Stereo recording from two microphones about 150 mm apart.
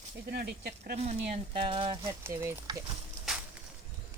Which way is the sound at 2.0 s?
15° right (ahead or behind).